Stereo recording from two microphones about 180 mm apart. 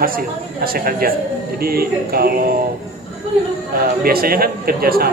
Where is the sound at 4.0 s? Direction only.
55° right (ahead or behind).